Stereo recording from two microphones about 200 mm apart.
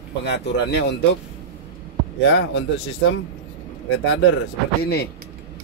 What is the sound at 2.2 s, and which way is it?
Speech, 60° left (ahead or behind).